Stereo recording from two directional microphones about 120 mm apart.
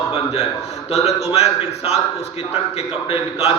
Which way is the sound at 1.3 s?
60° left (ahead or behind).